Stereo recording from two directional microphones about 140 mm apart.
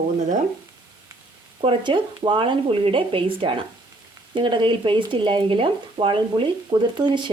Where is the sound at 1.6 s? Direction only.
40° right (ahead or behind).